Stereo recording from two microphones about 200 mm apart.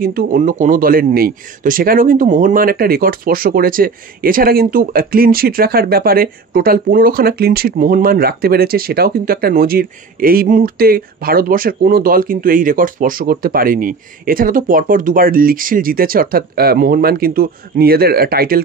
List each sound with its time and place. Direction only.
0.0 s a man's voice: 45° right (ahead or behind)